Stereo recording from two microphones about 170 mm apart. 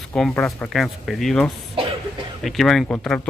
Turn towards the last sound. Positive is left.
turn(degrees=5)  # may be behind; listen again after turning